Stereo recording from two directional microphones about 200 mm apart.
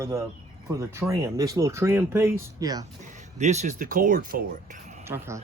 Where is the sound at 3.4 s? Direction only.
35° right (ahead or behind).